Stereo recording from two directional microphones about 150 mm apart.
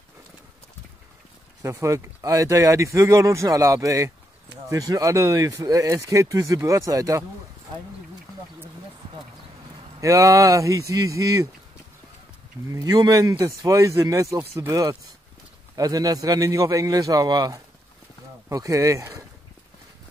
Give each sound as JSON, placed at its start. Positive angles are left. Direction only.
{"t": 1.6, "sound": "speech", "side_deg": -20}
{"t": 9.9, "sound": "speech", "side_deg": -20}
{"t": 12.7, "sound": "speech", "side_deg": -25}